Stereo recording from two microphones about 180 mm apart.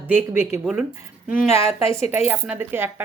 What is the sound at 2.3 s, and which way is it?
Speech, 10° right (ahead or behind).